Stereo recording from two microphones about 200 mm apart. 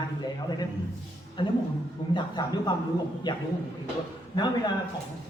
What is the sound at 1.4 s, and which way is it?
A man's voice, 25° left (ahead or behind).